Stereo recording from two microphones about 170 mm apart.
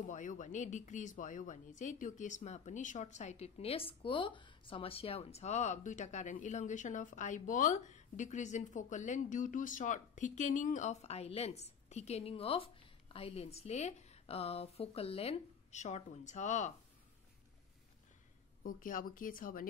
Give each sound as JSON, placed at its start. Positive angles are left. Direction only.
{"t": 0.1, "sound": "a woman's voice", "side_deg": 45}
{"t": 18.6, "sound": "speech", "side_deg": 55}